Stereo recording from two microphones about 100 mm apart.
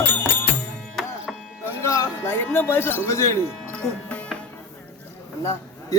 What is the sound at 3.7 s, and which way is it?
Music, 15° left (ahead or behind).